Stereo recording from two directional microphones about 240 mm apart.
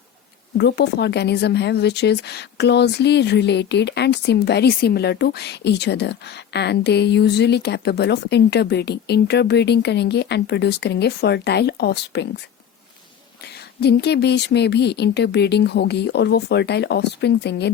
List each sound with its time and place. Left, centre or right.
0.5 s a woman's voice: left
13.4 s a woman's voice: left